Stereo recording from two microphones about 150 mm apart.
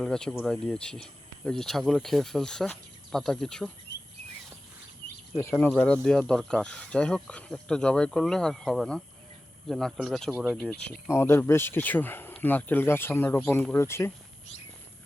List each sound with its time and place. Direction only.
0.0 s speech: 5° left (ahead or behind)
5.4 s speech: 15° left (ahead or behind)
5.7 s speech: 5° left (ahead or behind)
11.1 s speech: 15° left (ahead or behind)